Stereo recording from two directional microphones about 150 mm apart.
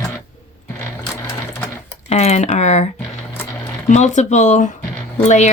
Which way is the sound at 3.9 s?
50° left (ahead or behind).